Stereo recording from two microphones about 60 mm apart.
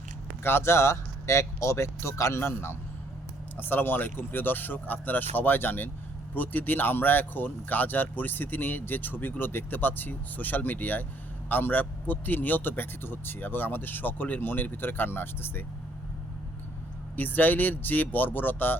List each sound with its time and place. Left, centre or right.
0.4 s speech: left
17.2 s speech: left